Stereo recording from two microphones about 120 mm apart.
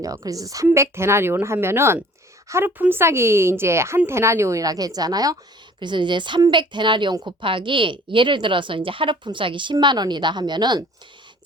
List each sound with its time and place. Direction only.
0.3 s a woman's voice: 30° right (ahead or behind)